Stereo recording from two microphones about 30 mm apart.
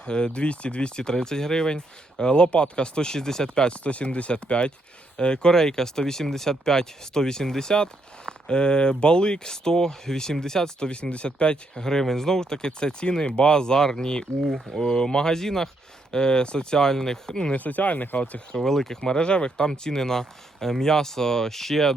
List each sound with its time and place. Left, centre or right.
0.0 s speech: left
1.1 s speech: centre
3.5 s speech: left
3.8 s speech: left
5.5 s speech: centre
10.8 s speech: left
11.8 s speech: centre
16.1 s speech: left
17.6 s speech: left
18.2 s speech: left
18.5 s speech: centre
18.9 s speech: left; by 21.9 s centre